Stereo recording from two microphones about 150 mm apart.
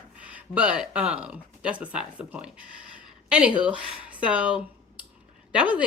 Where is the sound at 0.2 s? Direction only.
10° right (ahead or behind).